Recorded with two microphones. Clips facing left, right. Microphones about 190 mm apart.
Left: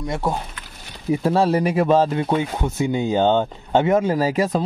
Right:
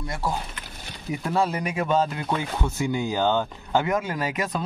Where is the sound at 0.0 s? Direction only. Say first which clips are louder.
Left 5 dB; 25° left (ahead or behind).